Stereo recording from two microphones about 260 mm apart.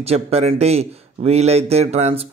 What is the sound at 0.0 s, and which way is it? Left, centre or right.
Speech, right.